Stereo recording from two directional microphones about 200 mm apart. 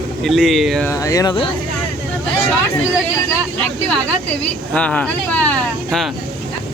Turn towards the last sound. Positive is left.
turn(degrees=5)  # may be behind; listen again after turning